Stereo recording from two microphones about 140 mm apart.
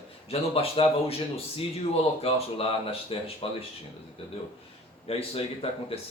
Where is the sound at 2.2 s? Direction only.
45° left (ahead or behind).